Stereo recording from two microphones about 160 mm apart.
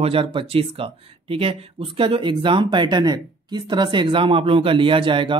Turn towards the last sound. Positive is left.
turn(degrees=-30)  # may be behind; listen again after turning